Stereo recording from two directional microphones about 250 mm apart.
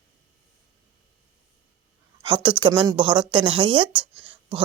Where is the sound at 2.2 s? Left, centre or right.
Centre.